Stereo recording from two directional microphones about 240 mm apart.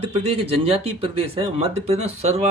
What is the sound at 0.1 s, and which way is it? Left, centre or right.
A man's voice, right.